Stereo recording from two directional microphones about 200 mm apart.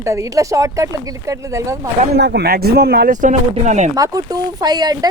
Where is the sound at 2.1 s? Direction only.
55° right (ahead or behind); by 3.9 s 35° right (ahead or behind).